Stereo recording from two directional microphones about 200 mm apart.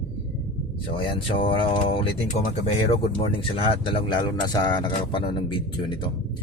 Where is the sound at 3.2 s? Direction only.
25° left (ahead or behind).